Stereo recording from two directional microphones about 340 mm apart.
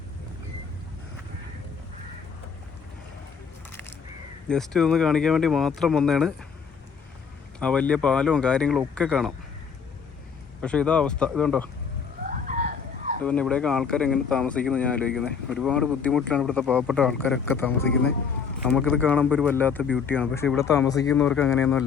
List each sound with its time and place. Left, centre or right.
3.7 s a sound: centre
4.4 s speech: centre
7.6 s speech: centre
10.6 s speech: centre
12.2 s a sound: right
13.2 s speech: centre